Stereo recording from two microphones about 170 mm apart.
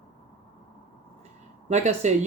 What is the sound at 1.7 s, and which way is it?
Speech, 45° right (ahead or behind).